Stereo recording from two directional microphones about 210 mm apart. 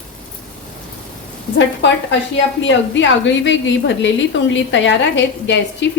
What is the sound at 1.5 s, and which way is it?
A woman's voice, 60° left (ahead or behind).